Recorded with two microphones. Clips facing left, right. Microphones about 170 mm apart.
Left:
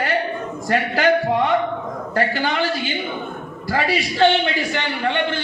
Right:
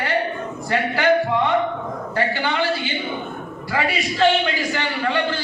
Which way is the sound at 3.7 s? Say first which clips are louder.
Left 2 dB; 35° left (ahead or behind).